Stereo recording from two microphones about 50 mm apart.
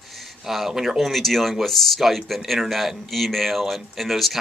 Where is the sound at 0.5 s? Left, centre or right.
Centre.